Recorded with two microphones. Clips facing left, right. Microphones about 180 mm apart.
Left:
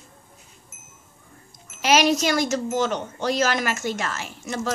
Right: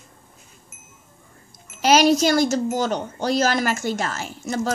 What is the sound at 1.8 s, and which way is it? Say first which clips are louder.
Speech: right 3 dB; 35° right (ahead or behind).